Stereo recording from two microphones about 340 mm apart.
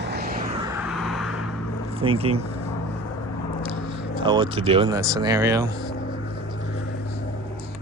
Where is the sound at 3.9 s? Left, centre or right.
Centre.